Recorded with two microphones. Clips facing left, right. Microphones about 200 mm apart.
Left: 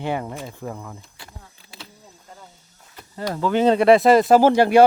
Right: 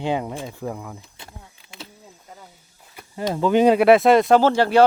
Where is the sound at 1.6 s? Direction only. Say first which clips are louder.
Even; 40° left (ahead or behind).